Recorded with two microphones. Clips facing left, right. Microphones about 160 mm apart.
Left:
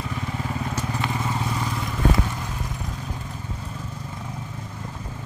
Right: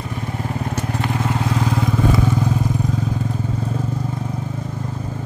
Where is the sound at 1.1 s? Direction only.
75° right (ahead or behind); by 1.9 s 90° right.